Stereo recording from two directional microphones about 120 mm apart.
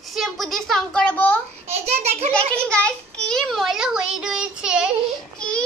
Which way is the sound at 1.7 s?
65° right (ahead or behind).